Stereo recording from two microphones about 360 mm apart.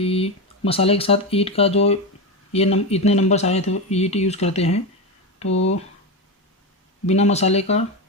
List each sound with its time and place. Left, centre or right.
0.0 s speech: centre
5.5 s speech: left
7.1 s speech: centre